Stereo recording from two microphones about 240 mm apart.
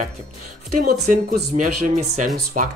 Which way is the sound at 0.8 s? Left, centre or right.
Right.